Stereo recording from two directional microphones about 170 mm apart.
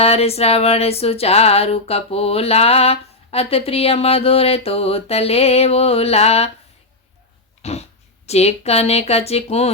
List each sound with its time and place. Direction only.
0.0 s music: 35° left (ahead or behind)
7.6 s dog: 40° left (ahead or behind)
8.3 s music: 40° left (ahead or behind)